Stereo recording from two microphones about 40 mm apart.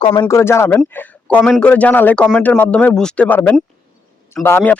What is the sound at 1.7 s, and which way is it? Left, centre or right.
A man's voice, left.